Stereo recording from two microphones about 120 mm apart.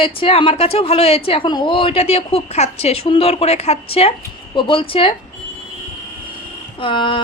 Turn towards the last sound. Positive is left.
turn(degrees=45)  # may be behind; listen again after turning